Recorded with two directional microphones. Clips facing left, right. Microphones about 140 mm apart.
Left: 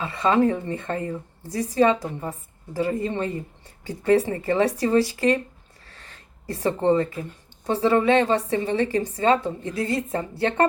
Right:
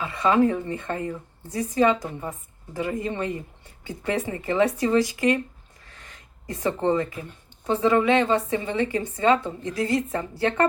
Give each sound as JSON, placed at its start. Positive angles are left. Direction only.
{"t": 0.0, "sound": "a woman's voice", "side_deg": 30}
{"t": 5.8, "sound": "a sound", "side_deg": 35}
{"t": 6.9, "sound": "a woman's voice", "side_deg": 30}